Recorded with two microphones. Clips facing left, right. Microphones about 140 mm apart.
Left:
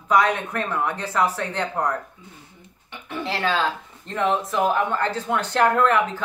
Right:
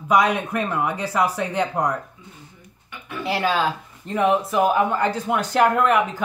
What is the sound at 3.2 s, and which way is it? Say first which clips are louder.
Speech: right 2 dB; 10° right (ahead or behind).